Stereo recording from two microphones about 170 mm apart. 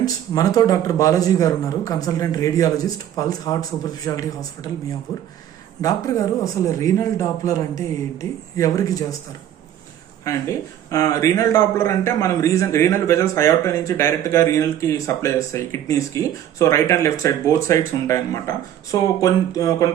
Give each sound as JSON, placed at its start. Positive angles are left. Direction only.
{"t": 0.0, "sound": "speech", "side_deg": 20}
{"t": 5.8, "sound": "speech", "side_deg": 20}
{"t": 10.3, "sound": "a man's voice", "side_deg": 20}